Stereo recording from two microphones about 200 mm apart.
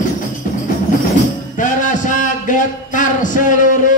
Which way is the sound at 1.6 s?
40° left (ahead or behind).